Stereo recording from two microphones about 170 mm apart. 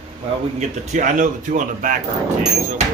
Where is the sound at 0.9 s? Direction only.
50° right (ahead or behind).